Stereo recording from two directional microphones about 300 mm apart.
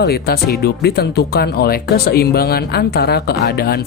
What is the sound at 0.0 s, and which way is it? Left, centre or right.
Speech, left.